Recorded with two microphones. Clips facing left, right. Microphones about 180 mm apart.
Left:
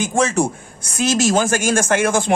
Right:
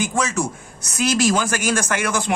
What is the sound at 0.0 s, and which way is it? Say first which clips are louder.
Speech: left 4 dB; 25° left (ahead or behind).